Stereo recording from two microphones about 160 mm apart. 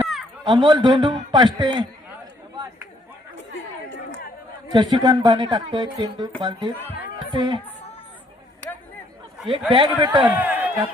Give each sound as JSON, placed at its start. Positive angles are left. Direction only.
{"t": 0.4, "sound": "speech", "side_deg": -25}
{"t": 4.7, "sound": "speech", "side_deg": -25}
{"t": 9.5, "sound": "speech", "side_deg": -30}
{"t": 10.2, "sound": "a sound", "side_deg": -10}